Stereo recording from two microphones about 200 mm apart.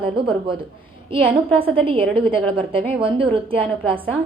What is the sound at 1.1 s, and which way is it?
A woman's voice, 25° right (ahead or behind).